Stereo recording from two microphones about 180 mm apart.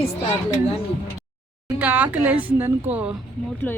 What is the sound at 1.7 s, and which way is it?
A woman's voice, 10° right (ahead or behind).